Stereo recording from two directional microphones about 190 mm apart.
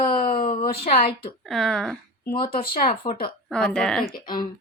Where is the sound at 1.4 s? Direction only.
Centre (ahead or behind).